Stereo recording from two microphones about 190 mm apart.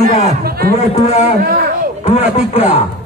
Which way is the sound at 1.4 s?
50° right (ahead or behind).